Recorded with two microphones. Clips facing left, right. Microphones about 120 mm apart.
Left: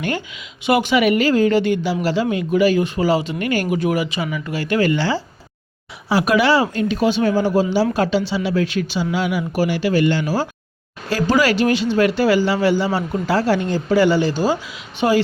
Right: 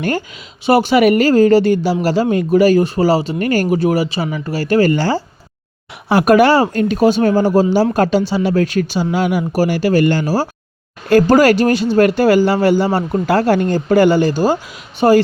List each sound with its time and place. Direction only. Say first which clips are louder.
0.6 s speech: right 5 dB; 35° right (ahead or behind)